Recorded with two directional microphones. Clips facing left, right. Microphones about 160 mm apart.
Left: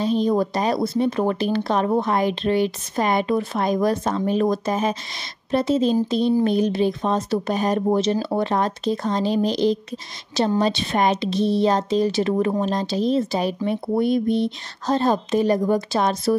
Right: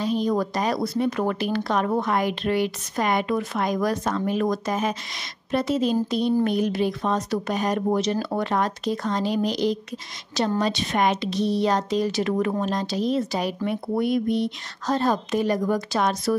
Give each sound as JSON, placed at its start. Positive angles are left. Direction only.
{"t": 0.0, "sound": "speech", "side_deg": 25}